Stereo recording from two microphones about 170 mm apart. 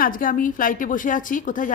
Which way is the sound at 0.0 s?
55° left (ahead or behind).